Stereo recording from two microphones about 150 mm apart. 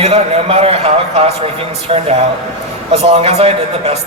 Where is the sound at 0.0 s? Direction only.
40° right (ahead or behind).